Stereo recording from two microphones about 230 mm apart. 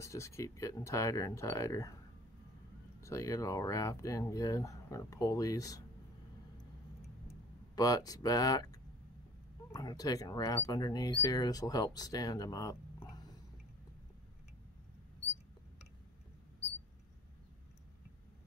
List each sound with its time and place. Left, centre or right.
0.0 s speech: centre
3.0 s speech: centre
7.7 s speech: centre